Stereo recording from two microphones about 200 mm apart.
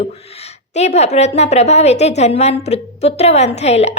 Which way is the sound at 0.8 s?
35° left (ahead or behind).